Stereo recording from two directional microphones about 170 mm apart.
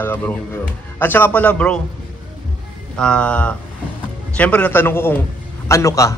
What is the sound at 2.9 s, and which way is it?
Speech, 5° left (ahead or behind).